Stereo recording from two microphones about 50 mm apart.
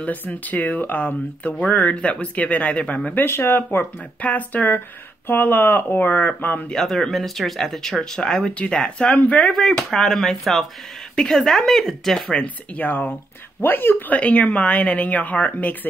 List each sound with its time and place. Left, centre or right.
0.0 s speech: left
2.0 s a woman's voice: left
3.3 s speech: left
4.2 s speech: left
6.7 s speech: centre
8.4 s a woman's voice: left
9.5 s speech: centre
12.7 s speech: left
14.1 s a woman's voice: left